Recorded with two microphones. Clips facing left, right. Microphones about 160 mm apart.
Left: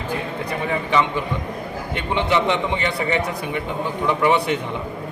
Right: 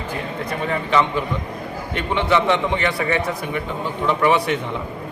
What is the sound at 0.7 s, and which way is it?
A man's voice, 15° left (ahead or behind).